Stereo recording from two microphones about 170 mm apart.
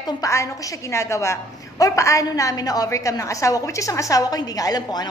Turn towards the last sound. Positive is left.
turn(degrees=25)  # may be behind; listen again after turning